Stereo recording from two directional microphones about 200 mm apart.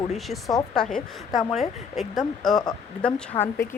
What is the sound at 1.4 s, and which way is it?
A woman's voice, centre (ahead or behind).